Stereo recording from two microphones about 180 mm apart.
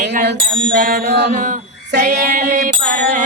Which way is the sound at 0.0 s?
40° right (ahead or behind).